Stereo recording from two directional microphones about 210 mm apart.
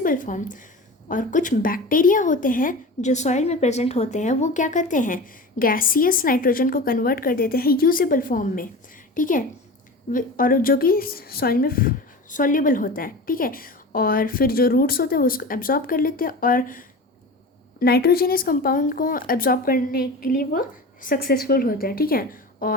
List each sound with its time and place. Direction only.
0.0 s a woman's voice: 40° left (ahead or behind)